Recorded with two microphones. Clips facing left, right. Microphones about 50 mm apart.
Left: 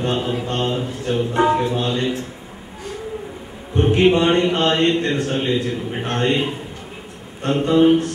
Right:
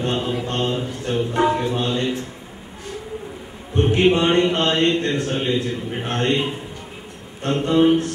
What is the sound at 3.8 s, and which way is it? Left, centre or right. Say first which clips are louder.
A man's voice: left 2 dB; centre.